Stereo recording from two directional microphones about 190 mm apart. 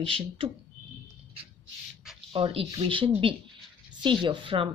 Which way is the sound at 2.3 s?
30° right (ahead or behind).